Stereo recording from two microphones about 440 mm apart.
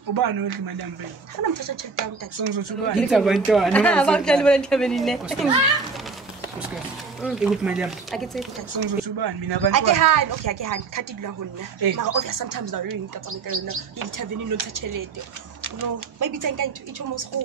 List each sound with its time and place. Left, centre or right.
0.1 s speech: right
2.3 s speech: right
3.0 s speech: centre
6.7 s speech: centre
8.7 s speech: right
9.7 s speech: right
14.1 s speech: right